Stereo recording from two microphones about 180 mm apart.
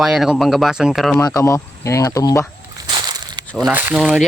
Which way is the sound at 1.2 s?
20° left (ahead or behind).